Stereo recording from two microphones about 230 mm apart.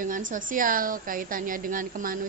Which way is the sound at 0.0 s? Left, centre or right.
Right.